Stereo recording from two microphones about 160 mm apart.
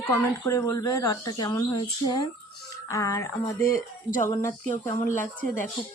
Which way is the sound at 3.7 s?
55° left (ahead or behind).